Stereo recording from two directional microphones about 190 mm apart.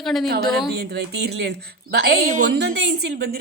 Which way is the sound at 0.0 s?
Centre (ahead or behind).